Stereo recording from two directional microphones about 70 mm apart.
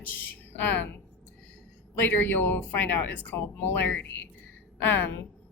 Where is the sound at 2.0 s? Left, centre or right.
Left.